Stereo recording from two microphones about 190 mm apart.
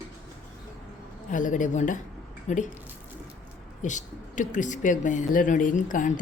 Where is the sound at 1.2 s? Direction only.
45° left (ahead or behind).